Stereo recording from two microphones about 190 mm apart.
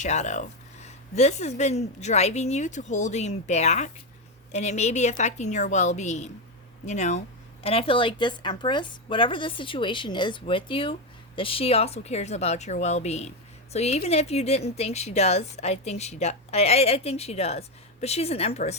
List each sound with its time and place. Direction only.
0.0 s a woman's voice: 40° left (ahead or behind)